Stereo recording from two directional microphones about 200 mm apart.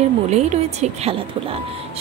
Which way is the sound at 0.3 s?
35° right (ahead or behind).